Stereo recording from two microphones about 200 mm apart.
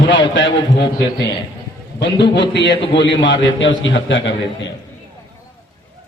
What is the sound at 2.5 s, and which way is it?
A man's voice, 60° left (ahead or behind).